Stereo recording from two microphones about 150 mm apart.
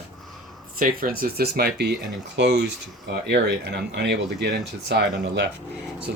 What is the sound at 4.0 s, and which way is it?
Speech, 90° right.